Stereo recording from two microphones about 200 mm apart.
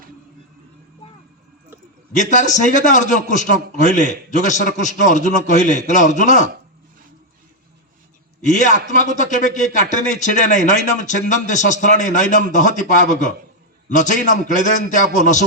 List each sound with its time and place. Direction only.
2.1 s a man's voice: 40° left (ahead or behind)
8.4 s a man's voice: 40° left (ahead or behind)